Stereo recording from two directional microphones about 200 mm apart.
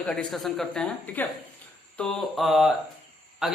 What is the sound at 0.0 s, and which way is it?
Speech, 5° left (ahead or behind).